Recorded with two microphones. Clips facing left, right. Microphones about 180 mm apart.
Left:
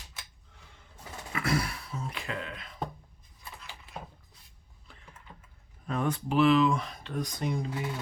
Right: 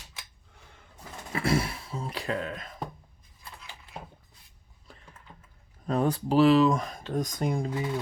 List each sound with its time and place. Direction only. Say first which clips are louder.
1.3 s speech: right 3 dB; 30° right (ahead or behind)
5.8 s speech: right 4 dB; 35° right (ahead or behind)